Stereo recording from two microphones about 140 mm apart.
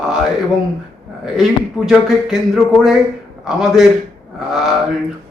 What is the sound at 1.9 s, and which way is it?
Speech, centre (ahead or behind).